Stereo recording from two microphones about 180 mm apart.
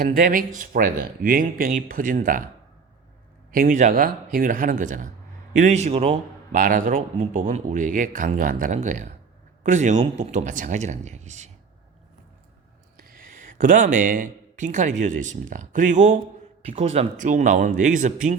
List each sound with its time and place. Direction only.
0.0 s a man's voice: 50° right (ahead or behind)
3.5 s a man's voice: 50° right (ahead or behind)
13.6 s a man's voice: 45° right (ahead or behind)